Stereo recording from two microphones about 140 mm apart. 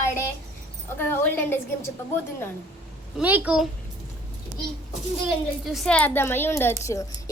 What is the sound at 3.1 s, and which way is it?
Speech, 10° right (ahead or behind).